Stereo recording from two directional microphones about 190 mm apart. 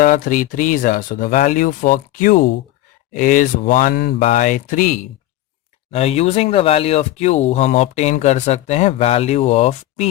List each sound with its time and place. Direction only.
0.0 s speech: 45° left (ahead or behind)
5.9 s speech: 35° left (ahead or behind)